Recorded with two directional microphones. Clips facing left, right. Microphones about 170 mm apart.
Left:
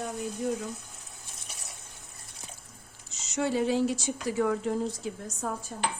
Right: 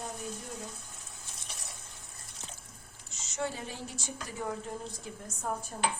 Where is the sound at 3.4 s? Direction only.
85° left.